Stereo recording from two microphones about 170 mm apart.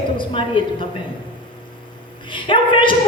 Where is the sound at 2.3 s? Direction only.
30° left (ahead or behind).